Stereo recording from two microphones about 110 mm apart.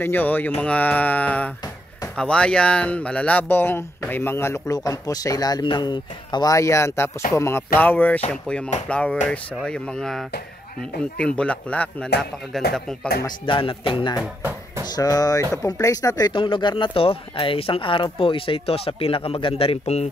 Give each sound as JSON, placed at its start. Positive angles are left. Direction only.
{"t": 0.0, "sound": "speech", "side_deg": 20}
{"t": 4.7, "sound": "speech", "side_deg": 35}
{"t": 13.5, "sound": "speech", "side_deg": 50}
{"t": 15.0, "sound": "speech", "side_deg": 35}